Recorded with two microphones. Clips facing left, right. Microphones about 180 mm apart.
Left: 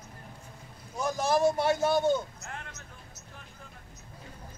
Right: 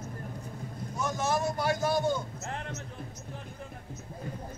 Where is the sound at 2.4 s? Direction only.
30° right (ahead or behind).